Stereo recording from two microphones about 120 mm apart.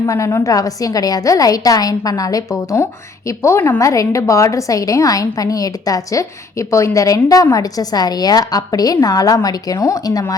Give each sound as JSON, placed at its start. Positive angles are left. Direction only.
{"t": 0.0, "sound": "a woman's voice", "side_deg": 25}